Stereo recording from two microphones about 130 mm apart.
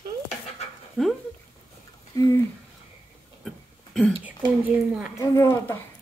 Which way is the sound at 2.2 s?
25° left (ahead or behind).